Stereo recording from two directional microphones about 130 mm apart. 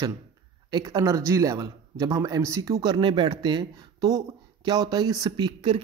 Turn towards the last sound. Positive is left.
turn(degrees=-35)  # may be behind; listen again after turning